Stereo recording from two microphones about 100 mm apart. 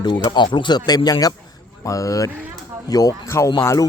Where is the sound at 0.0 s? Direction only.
45° left (ahead or behind); by 3.8 s 30° left (ahead or behind).